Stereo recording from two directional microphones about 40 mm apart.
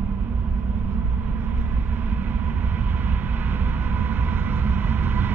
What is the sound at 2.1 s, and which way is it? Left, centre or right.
Vehicle, right.